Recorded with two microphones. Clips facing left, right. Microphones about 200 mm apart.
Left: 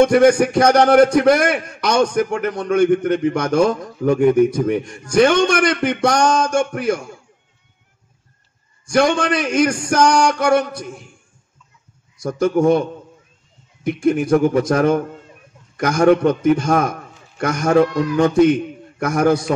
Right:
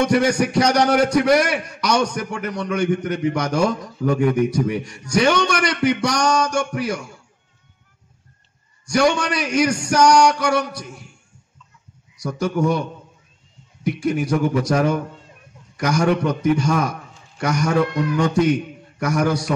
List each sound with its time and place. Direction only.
0.0 s a man's voice: 50° left (ahead or behind)
8.8 s a man's voice: 50° left (ahead or behind)
12.2 s a man's voice: 50° left (ahead or behind)
13.8 s a man's voice: 50° left (ahead or behind)